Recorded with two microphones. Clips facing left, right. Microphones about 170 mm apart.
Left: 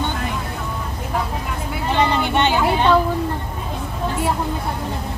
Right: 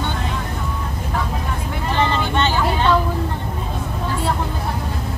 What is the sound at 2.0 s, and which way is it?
Vehicle, 15° left (ahead or behind).